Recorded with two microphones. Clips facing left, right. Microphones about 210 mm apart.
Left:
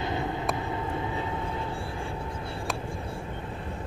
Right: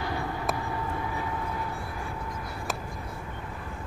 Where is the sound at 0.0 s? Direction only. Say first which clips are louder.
Left 1 dB; 20° left (ahead or behind).